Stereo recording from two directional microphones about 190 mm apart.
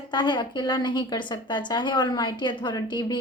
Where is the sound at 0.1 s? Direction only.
25° left (ahead or behind).